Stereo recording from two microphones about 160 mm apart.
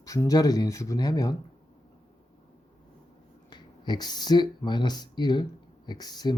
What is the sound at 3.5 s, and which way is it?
Speech, 25° left (ahead or behind).